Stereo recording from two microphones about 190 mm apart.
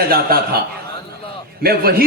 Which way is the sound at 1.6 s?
55° right (ahead or behind).